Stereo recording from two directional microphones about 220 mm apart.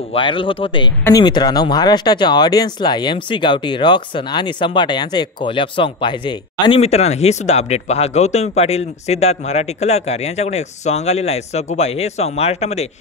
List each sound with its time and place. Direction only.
0.1 s speech: 25° left (ahead or behind)